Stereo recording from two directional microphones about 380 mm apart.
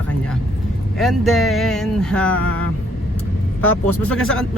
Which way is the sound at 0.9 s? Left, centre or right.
Centre.